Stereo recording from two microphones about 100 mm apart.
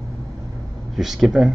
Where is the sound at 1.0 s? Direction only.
Centre (ahead or behind).